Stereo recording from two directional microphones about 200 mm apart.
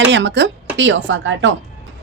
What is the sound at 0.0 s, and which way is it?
A woman's voice, 65° right (ahead or behind).